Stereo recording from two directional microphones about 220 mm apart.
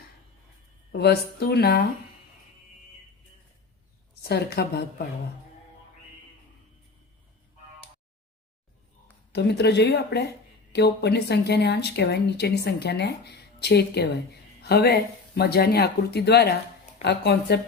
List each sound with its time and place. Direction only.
0.9 s speech: 45° left (ahead or behind)
4.1 s speech: 45° left (ahead or behind)
9.3 s a woman's voice: 50° left (ahead or behind)